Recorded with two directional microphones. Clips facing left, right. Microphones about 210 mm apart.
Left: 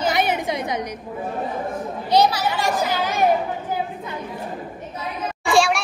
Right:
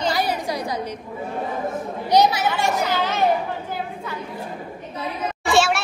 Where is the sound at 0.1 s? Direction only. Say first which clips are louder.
Left 2 dB; 20° left (ahead or behind).